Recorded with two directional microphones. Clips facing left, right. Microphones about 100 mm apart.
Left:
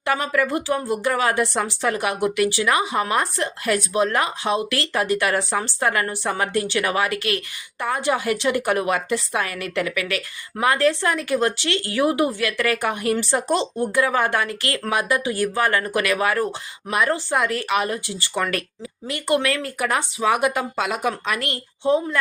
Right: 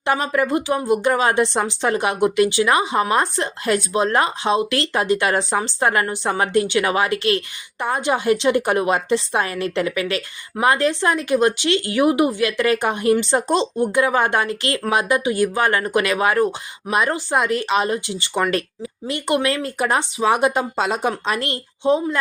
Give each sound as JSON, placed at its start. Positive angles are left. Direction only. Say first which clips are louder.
{"t": 0.0, "sound": "a woman's voice", "louder": "right 2 dB", "side_deg": -25}